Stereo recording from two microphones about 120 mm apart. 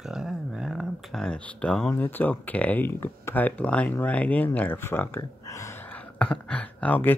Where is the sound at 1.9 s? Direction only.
15° left (ahead or behind).